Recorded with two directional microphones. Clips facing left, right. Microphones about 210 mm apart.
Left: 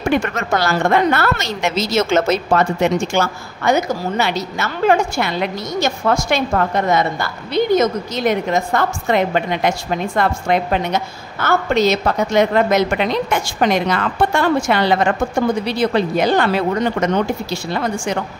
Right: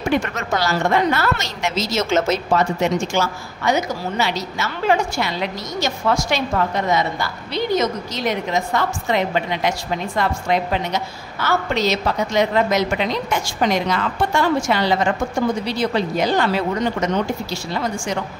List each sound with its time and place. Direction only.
0.1 s a woman's voice: 60° left (ahead or behind)